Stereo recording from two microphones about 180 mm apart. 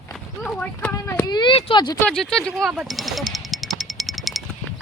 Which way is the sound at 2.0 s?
5° left (ahead or behind).